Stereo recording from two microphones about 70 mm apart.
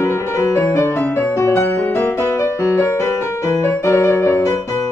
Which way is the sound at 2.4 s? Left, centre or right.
Left.